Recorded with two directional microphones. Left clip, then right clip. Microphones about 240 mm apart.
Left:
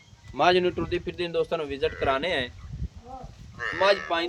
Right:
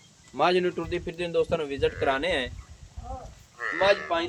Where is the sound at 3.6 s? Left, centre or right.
Left.